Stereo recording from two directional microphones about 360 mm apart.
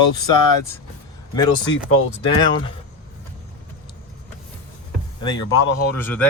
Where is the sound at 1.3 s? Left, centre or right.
Centre.